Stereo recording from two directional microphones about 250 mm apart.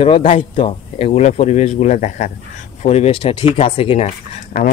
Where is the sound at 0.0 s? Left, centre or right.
Left.